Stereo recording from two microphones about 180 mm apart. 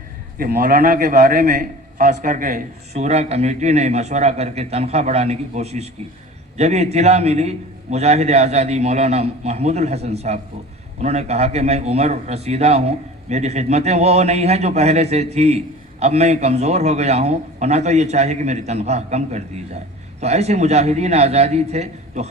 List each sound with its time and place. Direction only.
0.3 s a man's voice: 55° right (ahead or behind); by 22.3 s 40° right (ahead or behind)